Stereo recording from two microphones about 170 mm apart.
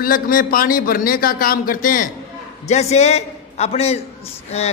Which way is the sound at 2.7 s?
40° left (ahead or behind).